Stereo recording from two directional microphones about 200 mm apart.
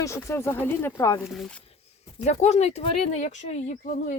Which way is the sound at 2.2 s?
35° left (ahead or behind).